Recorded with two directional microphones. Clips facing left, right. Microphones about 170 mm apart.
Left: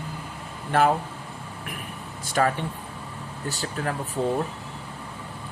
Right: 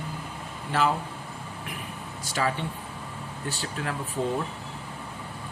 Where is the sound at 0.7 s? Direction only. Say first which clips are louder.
Left 4 dB; 55° left (ahead or behind).